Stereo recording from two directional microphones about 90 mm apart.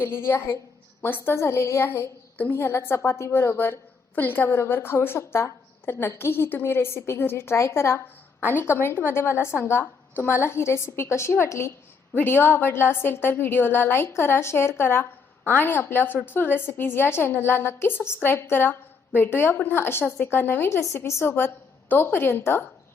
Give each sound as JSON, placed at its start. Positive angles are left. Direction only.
{"t": 0.0, "sound": "a woman's voice", "side_deg": 30}